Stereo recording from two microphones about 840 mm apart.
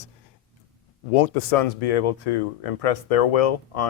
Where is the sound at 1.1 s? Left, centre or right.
Left.